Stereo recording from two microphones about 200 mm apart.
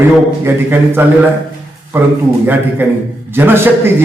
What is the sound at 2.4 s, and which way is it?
A man's voice, 10° right (ahead or behind).